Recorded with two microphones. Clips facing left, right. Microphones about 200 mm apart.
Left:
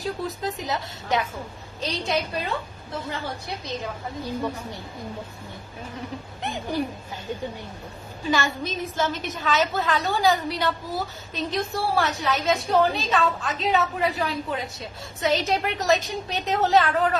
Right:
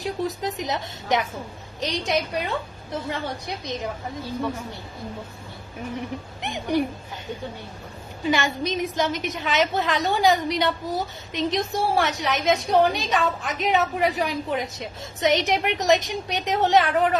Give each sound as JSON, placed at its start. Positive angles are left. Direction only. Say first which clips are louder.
{"t": 0.0, "sound": "a woman's voice", "louder": "right 2 dB", "side_deg": -20}
{"t": 6.4, "sound": "a woman's voice", "louder": "right 4 dB", "side_deg": -15}
{"t": 8.3, "sound": "a woman's voice", "louder": "right 2 dB", "side_deg": -20}